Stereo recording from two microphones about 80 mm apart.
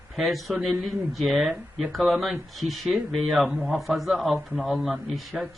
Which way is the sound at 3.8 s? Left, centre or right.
Centre.